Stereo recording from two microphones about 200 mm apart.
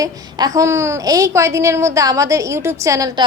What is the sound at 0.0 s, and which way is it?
A woman's voice, 20° right (ahead or behind).